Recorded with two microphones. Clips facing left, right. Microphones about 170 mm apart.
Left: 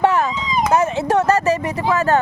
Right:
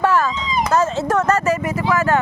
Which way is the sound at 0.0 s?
20° left (ahead or behind).